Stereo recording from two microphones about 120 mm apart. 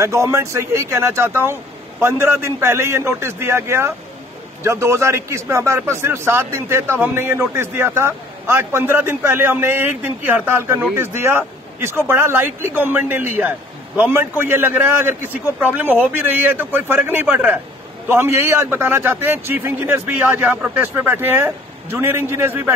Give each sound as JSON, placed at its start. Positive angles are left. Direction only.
{"t": 0.0, "sound": "a man's voice", "side_deg": -25}